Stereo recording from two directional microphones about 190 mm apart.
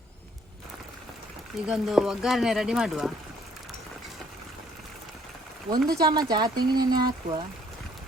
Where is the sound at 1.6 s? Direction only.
Centre (ahead or behind).